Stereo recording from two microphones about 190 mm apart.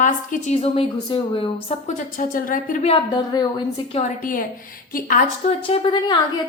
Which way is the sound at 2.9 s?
20° left (ahead or behind).